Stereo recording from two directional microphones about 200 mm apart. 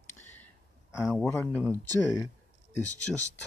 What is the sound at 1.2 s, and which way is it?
Speech, 10° left (ahead or behind).